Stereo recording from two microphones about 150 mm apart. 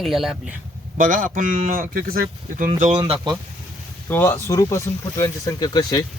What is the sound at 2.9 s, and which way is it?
Speech, 35° right (ahead or behind).